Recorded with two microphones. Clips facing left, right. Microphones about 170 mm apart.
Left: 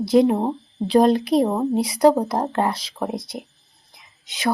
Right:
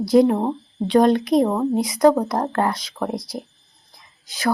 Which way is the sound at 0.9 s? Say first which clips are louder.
Even; 30° left (ahead or behind).